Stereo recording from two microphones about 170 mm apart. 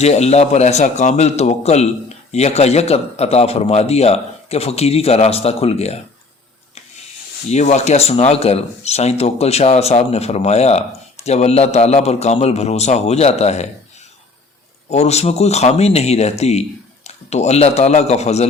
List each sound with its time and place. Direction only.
0.0 s speech: 40° left (ahead or behind)
7.5 s speech: 40° left (ahead or behind)
14.8 s speech: 40° left (ahead or behind)